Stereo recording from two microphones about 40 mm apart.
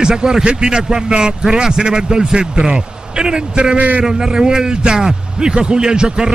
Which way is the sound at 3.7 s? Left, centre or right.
Right.